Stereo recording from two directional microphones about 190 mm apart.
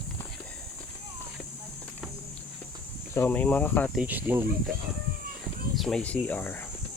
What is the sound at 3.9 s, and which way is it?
Speech, 5° right (ahead or behind).